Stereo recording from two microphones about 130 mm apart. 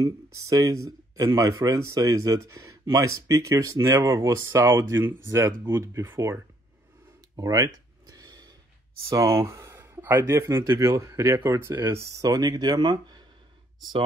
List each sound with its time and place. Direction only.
0.0 s speech: 25° right (ahead or behind)
7.3 s a sound: 25° right (ahead or behind)
9.1 s speech: 20° right (ahead or behind)